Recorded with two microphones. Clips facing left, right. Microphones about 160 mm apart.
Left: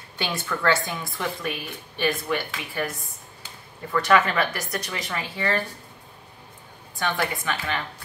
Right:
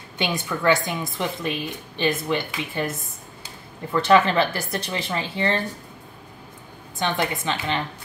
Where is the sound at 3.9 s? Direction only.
30° right (ahead or behind).